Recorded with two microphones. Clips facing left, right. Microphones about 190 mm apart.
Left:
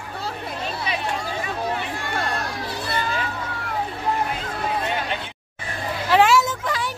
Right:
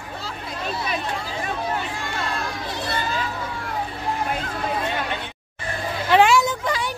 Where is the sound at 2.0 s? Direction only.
55° left (ahead or behind).